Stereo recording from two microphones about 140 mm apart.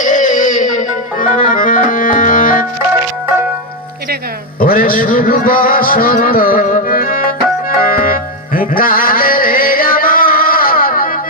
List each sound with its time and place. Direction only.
0.0 s music: 65° left (ahead or behind)
4.6 s music: 90° left